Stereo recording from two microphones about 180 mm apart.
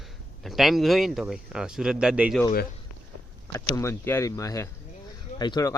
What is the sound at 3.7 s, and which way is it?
A man's voice, 15° left (ahead or behind).